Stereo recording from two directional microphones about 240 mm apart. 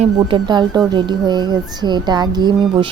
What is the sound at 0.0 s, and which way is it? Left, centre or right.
Speech, centre.